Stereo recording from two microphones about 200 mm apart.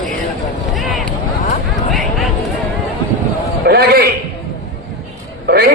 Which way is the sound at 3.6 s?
50° right (ahead or behind).